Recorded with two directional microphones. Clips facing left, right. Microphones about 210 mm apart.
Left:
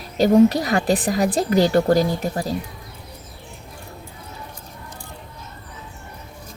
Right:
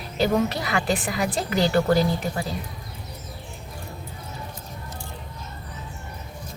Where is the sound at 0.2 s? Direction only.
40° left (ahead or behind).